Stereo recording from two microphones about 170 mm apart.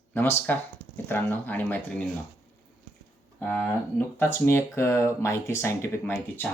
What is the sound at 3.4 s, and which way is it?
Speech, 10° left (ahead or behind).